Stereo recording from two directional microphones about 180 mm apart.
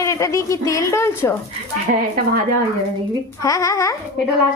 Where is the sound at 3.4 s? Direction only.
20° left (ahead or behind).